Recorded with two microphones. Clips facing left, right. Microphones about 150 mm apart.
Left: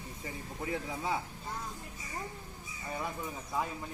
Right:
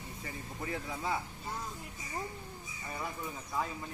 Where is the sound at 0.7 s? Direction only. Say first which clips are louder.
Left 1 dB; 15° left (ahead or behind).